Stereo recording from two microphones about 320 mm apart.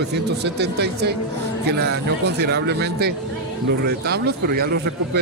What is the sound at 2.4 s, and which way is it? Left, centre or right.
Speech, right.